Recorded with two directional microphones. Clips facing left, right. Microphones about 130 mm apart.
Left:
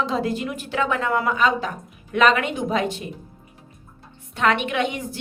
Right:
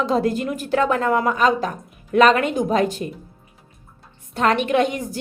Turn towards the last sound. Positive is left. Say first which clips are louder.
# right 5 dB
turn(degrees=-40)  # may be behind; listen again after turning